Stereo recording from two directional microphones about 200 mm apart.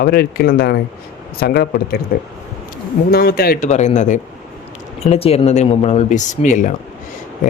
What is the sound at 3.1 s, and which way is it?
Speech, 50° left (ahead or behind).